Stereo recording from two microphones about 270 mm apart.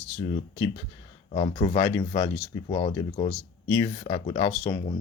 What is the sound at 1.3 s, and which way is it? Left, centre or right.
Speech, centre.